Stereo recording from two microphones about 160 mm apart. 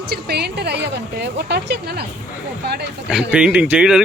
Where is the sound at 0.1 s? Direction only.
90° right.